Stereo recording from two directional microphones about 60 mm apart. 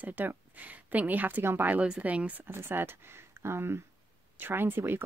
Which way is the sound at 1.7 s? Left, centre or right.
Centre.